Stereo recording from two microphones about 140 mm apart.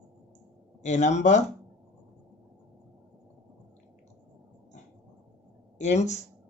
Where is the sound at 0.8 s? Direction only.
55° left (ahead or behind).